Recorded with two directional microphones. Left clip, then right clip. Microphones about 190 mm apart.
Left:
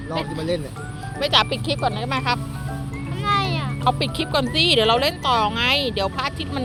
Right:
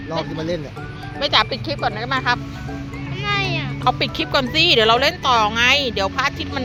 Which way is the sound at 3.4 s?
15° left (ahead or behind).